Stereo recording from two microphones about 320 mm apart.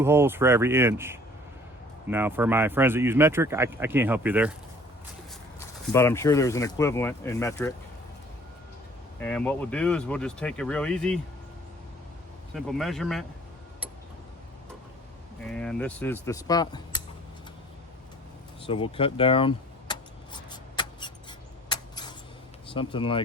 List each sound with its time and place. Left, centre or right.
0.0 s speech: centre
5.5 s speech: centre
9.1 s speech: centre
12.5 s speech: centre
15.4 s speech: centre
18.6 s speech: centre
20.5 s a sound: centre
22.7 s speech: centre